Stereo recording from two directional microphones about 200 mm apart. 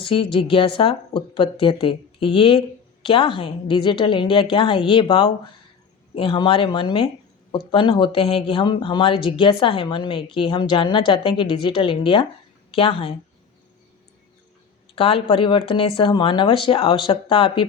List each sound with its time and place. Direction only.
0.0 s speech: 25° left (ahead or behind)
14.9 s speech: 30° left (ahead or behind)